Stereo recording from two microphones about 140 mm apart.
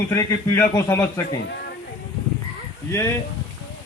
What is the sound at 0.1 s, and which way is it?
Speech, 25° left (ahead or behind).